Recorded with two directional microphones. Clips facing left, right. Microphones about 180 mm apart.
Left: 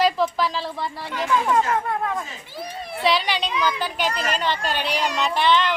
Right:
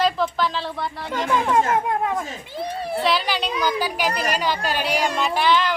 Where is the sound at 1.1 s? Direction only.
40° right (ahead or behind).